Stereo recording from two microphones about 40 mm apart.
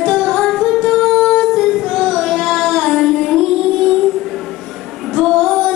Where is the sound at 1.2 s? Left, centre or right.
Centre.